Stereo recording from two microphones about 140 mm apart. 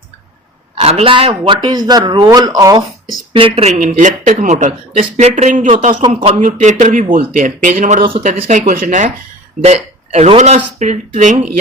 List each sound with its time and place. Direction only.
0.8 s speech: 45° right (ahead or behind); by 2.8 s 25° right (ahead or behind)
3.3 s speech: 40° right (ahead or behind)
3.7 s speech: 60° right (ahead or behind)
6.1 s speech: 45° right (ahead or behind)
6.4 s speech: 60° right (ahead or behind)
8.2 s speech: 50° right (ahead or behind)
8.5 s speech: 80° right
9.6 s speech: 55° right (ahead or behind)